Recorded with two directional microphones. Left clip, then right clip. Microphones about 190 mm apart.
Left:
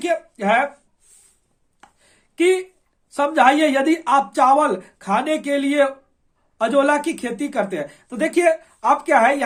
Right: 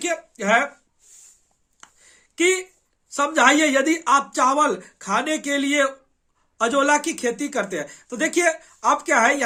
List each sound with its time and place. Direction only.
0.0 s speech: 15° right (ahead or behind)
1.8 s a sound: 15° right (ahead or behind)
3.1 s speech: 15° right (ahead or behind)